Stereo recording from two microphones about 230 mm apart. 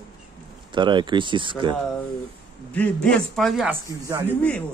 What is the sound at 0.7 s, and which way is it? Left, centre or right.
Speech, centre.